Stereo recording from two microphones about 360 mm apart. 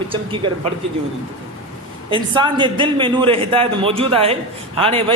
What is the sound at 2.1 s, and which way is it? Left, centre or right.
A man's voice, centre.